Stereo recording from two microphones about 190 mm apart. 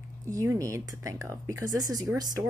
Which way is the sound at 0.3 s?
15° right (ahead or behind).